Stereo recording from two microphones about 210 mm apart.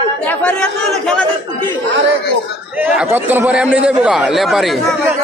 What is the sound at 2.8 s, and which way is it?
A man's voice, 10° right (ahead or behind).